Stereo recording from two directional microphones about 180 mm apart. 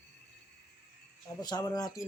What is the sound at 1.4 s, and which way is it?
Speech, 25° left (ahead or behind).